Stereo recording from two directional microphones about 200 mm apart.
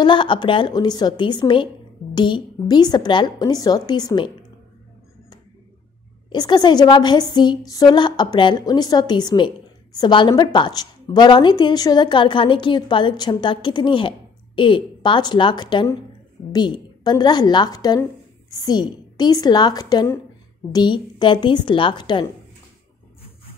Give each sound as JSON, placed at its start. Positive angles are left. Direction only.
{"t": 0.0, "sound": "a woman's voice", "side_deg": 25}
{"t": 6.3, "sound": "a woman's voice", "side_deg": 20}